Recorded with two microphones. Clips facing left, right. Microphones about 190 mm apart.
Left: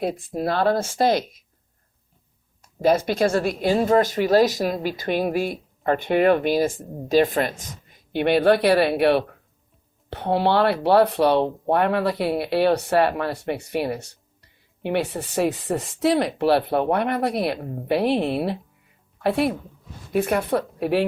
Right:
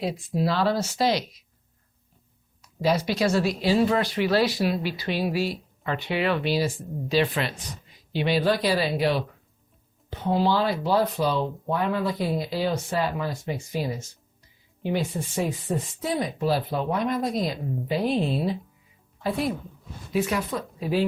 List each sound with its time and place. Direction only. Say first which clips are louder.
0.0 s speech: left 2 dB; 50° left (ahead or behind)
2.6 s speech: left 5 dB; 50° left (ahead or behind); by 19.5 s 65° left (ahead or behind)
20.1 s speech: left 5 dB; 55° left (ahead or behind)